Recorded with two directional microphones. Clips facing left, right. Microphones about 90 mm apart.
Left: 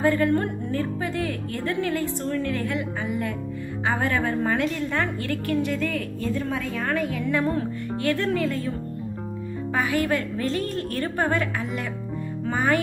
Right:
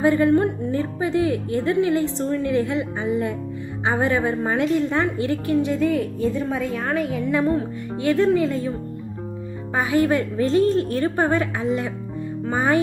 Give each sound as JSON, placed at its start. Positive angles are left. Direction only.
{"t": 0.0, "sound": "a woman's voice", "side_deg": -20}
{"t": 9.7, "sound": "a woman's voice", "side_deg": -20}